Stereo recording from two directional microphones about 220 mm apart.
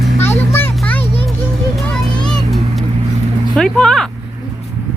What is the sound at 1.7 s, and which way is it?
Vehicle, 5° left (ahead or behind).